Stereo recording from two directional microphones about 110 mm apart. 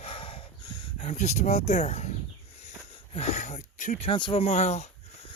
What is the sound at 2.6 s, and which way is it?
Wheeze, 80° left.